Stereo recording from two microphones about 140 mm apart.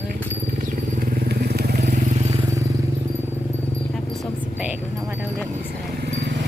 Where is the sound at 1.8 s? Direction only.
55° right (ahead or behind).